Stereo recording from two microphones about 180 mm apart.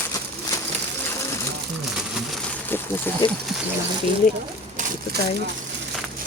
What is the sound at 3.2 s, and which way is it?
Speech, 25° left (ahead or behind).